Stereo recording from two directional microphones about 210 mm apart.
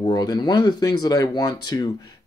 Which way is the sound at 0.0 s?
20° left (ahead or behind).